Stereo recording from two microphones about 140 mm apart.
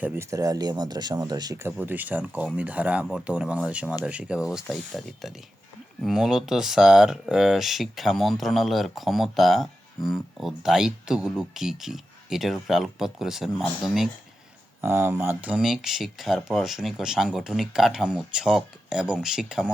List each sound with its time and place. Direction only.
0.0 s speech: 15° right (ahead or behind)
1.7 s speech: 10° right (ahead or behind)
14.8 s speech: 15° right (ahead or behind)